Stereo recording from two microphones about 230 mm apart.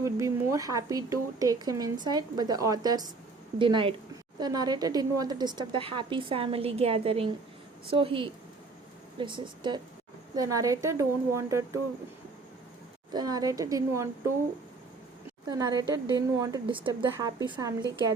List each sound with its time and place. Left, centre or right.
0.0 s a woman's voice: centre
13.1 s speech: centre
15.4 s speech: centre